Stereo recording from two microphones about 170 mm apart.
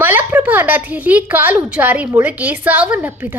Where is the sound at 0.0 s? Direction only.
10° right (ahead or behind).